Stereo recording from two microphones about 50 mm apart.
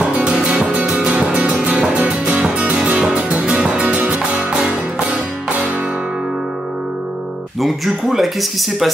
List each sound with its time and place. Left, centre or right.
0.0 s music: right
7.6 s speech: centre